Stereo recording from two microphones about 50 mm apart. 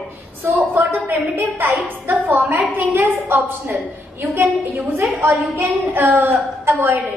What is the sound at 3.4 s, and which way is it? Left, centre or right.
A woman's voice, right.